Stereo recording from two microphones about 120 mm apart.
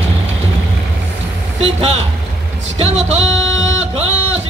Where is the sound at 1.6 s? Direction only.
60° right (ahead or behind).